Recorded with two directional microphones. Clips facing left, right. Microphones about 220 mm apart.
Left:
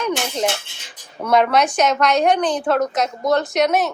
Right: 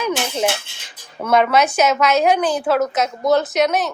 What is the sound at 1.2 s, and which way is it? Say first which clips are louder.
A woman's voice: right 1 dB; 5° right (ahead or behind).